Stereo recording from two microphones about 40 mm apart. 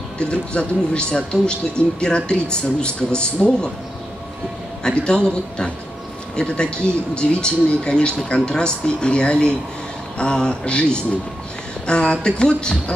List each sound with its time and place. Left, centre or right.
0.2 s speech: left
4.8 s speech: left
6.3 s speech: left